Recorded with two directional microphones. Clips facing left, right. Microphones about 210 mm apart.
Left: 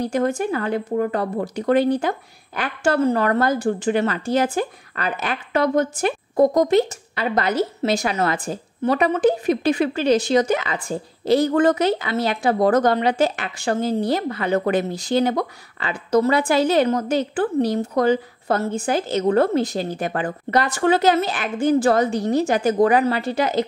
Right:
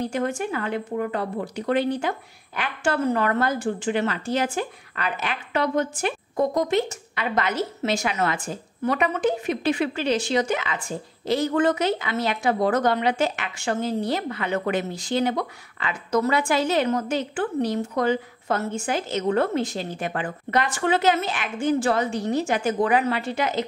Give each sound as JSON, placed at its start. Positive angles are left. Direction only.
{"t": 0.0, "sound": "speech", "side_deg": 40}